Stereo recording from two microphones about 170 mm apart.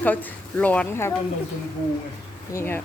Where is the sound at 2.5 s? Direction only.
15° left (ahead or behind).